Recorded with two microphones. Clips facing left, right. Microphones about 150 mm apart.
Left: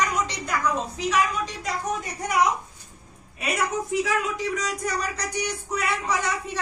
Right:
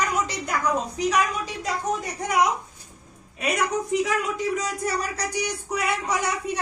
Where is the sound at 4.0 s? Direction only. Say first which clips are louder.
Right 1 dB; centre (ahead or behind).